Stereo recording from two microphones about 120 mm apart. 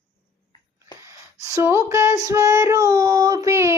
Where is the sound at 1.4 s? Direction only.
25° right (ahead or behind).